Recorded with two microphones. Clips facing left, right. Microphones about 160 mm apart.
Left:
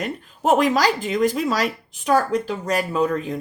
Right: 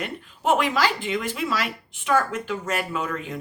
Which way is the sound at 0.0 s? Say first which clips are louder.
Left 4 dB; 40° left (ahead or behind).